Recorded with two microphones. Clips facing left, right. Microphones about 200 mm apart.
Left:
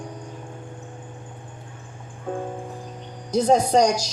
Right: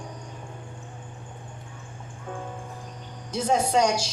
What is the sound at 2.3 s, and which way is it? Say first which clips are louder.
Music: left 8 dB; 35° left (ahead or behind).